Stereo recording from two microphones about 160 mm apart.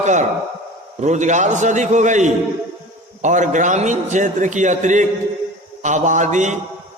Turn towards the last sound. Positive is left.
turn(degrees=-50)  # may be behind; listen again after turning